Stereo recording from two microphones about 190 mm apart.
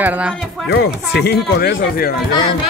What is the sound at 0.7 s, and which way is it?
Speech, 60° left (ahead or behind).